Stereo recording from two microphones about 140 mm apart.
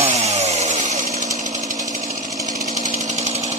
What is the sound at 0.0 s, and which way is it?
Chainsaw, 50° right (ahead or behind).